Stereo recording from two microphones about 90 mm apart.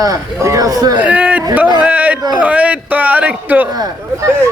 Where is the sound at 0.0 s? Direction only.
40° right (ahead or behind).